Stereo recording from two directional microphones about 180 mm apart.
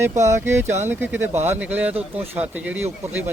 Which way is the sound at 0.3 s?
15° right (ahead or behind).